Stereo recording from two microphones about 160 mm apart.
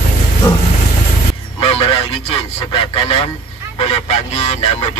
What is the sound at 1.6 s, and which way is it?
Speech, 35° left (ahead or behind).